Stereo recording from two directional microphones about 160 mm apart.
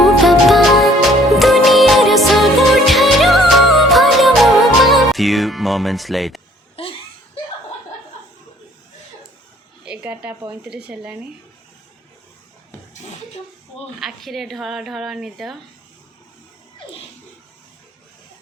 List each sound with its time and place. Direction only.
0.0 s music: centre (ahead or behind)
6.8 s laughter: 35° left (ahead or behind)
9.8 s speech: 10° right (ahead or behind)
14.0 s speech: centre (ahead or behind)